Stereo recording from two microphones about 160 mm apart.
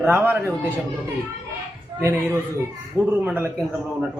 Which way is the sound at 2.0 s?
15° right (ahead or behind).